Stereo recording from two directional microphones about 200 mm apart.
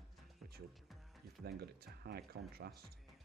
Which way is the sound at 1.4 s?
50° right (ahead or behind).